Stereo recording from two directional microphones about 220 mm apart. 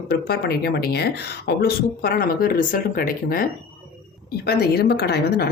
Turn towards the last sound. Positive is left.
turn(degrees=45)  # may be behind; listen again after turning